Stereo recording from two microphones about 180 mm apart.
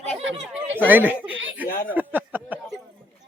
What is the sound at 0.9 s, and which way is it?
Speech, 10° right (ahead or behind).